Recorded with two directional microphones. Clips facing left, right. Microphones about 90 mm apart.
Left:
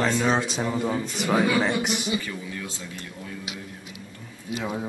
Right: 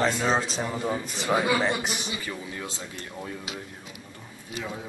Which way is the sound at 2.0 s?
25° right (ahead or behind).